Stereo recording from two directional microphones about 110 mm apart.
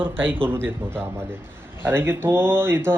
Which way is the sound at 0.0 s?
15° right (ahead or behind).